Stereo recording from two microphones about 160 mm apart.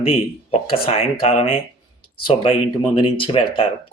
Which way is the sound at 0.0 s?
40° left (ahead or behind).